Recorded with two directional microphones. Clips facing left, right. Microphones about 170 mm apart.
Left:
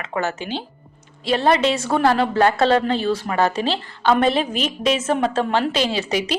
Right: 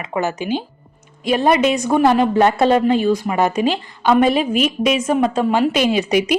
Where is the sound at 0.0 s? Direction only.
15° right (ahead or behind).